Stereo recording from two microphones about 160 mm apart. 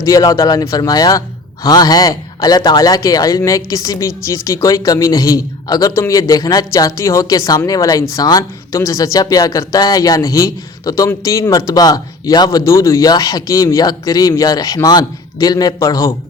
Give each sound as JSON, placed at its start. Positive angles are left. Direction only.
{"t": 0.0, "sound": "a man's voice", "side_deg": 20}